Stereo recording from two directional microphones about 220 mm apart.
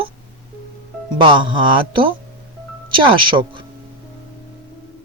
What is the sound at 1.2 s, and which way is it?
Speech, 20° right (ahead or behind).